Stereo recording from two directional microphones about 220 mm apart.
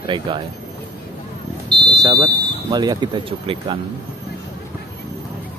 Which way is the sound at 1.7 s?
20° right (ahead or behind).